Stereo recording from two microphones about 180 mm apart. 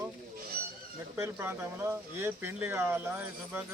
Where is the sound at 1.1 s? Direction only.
15° right (ahead or behind).